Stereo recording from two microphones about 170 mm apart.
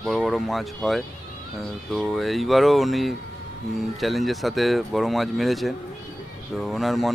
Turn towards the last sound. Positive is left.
turn(degrees=0)  # may be behind; listen again after turning